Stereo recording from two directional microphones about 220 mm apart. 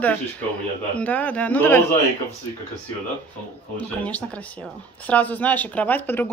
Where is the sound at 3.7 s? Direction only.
5° left (ahead or behind).